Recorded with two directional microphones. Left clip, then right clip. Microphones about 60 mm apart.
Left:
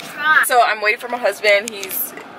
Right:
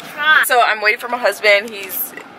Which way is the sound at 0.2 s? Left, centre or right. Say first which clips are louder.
Right 2 dB; right.